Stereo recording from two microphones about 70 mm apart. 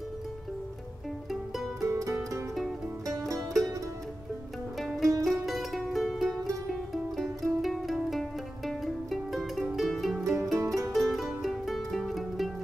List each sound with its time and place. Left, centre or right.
1.8 s music: right
4.7 s music: centre
10.6 s music: right
10.9 s music: centre